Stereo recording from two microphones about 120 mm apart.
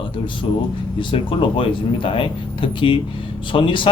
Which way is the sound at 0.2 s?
50° left (ahead or behind).